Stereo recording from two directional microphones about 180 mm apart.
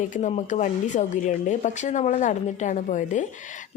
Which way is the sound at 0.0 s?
45° left (ahead or behind).